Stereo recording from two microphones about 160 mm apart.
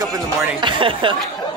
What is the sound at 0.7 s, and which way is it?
Speech, 30° right (ahead or behind).